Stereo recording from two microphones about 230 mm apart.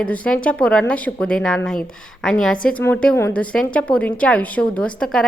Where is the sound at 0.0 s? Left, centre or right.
Centre.